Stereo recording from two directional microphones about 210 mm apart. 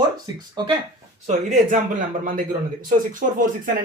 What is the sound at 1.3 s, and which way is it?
A man's voice, 35° right (ahead or behind).